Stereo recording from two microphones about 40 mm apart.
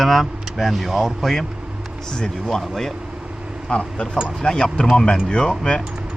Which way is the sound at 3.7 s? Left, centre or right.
Left.